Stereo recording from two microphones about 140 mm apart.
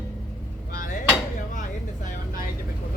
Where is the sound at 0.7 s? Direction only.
70° left (ahead or behind).